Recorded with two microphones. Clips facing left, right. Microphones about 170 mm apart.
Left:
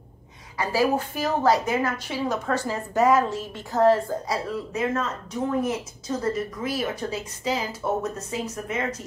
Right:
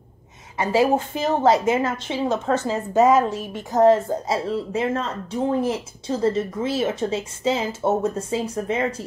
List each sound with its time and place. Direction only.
0.6 s a woman's voice: 25° right (ahead or behind)